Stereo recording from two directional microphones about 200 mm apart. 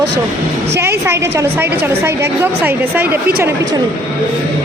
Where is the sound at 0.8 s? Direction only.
10° right (ahead or behind).